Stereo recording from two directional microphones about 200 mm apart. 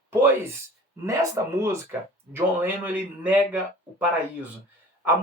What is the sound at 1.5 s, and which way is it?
Speech, 15° right (ahead or behind).